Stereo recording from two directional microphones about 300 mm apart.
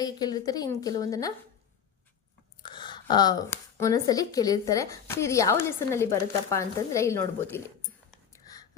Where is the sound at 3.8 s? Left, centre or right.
Centre.